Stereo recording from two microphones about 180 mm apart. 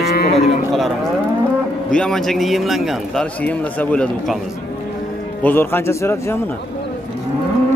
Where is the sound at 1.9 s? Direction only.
5° left (ahead or behind).